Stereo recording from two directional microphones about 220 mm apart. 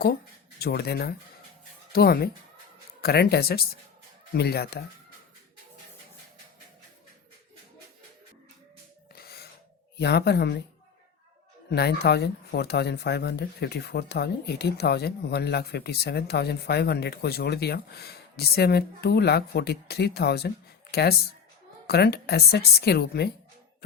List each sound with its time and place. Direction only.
0.6 s speech: 45° left (ahead or behind)
9.1 s gasp: 45° left (ahead or behind)
10.0 s speech: 50° left (ahead or behind)
11.7 s speech: 45° left (ahead or behind)